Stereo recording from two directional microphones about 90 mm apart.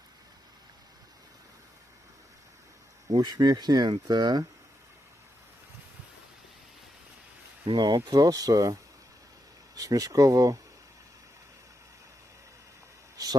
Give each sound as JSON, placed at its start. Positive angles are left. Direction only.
{"t": 3.1, "sound": "speech", "side_deg": -45}
{"t": 7.8, "sound": "speech", "side_deg": -55}
{"t": 13.2, "sound": "a sound", "side_deg": -45}